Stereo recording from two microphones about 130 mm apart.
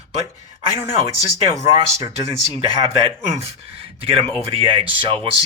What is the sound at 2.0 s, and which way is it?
Speech, 45° right (ahead or behind).